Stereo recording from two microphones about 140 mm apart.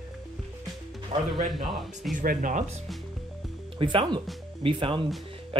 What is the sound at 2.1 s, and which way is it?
Speech, 70° right (ahead or behind).